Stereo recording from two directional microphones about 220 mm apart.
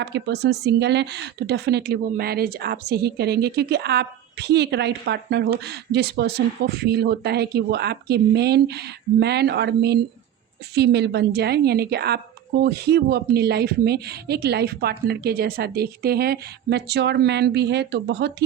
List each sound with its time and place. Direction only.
0.0 s speech: 50° right (ahead or behind)